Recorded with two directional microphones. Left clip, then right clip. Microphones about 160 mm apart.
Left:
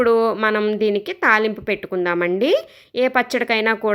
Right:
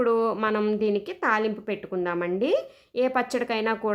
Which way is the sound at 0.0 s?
20° left (ahead or behind).